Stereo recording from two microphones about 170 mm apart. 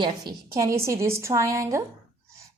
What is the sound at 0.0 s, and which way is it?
A woman's voice, 25° right (ahead or behind).